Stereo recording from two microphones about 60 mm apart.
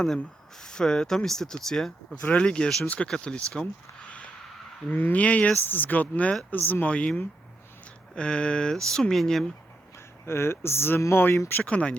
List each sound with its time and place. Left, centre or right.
0.6 s speech: centre
2.2 s speech: left
4.9 s speech: left
6.9 s speech: centre
10.2 s speech: left
11.6 s speech: left